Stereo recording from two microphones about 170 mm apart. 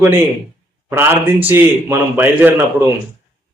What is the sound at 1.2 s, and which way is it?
Speech, 10° right (ahead or behind).